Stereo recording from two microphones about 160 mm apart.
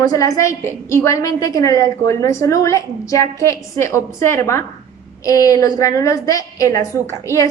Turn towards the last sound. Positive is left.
turn(degrees=20)  # may be behind; listen again after turning